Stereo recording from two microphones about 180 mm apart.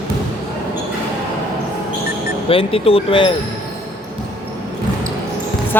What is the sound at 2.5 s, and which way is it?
Speech, 30° left (ahead or behind).